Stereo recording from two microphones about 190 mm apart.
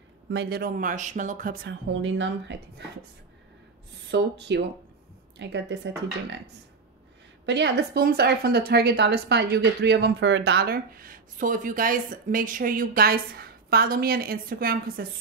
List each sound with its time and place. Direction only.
0.3 s a woman's voice: 60° right (ahead or behind)
1.9 s speech: 85° right
4.1 s a woman's voice: 65° right (ahead or behind)
7.4 s a woman's voice: 65° right (ahead or behind)